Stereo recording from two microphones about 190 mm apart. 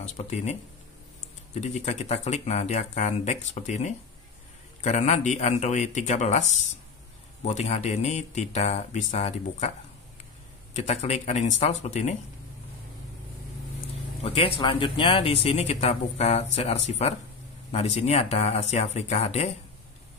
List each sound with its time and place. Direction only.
0.0 s speech: 35° left (ahead or behind)
10.7 s speech: 35° left (ahead or behind)
14.2 s speech: 30° left (ahead or behind)